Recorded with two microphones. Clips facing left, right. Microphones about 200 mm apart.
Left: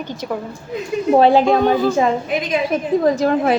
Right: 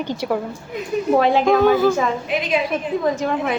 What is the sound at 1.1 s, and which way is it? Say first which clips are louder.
Speech: left 4 dB; 30° left (ahead or behind).